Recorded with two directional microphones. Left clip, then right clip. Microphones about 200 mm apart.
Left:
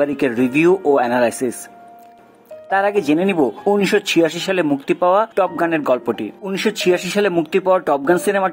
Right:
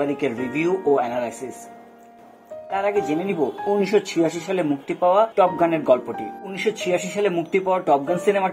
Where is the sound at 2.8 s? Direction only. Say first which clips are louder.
Left 3 dB; 25° left (ahead or behind).